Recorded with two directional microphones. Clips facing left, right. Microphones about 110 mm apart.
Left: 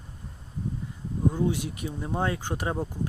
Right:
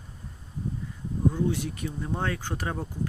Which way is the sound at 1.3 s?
15° left (ahead or behind).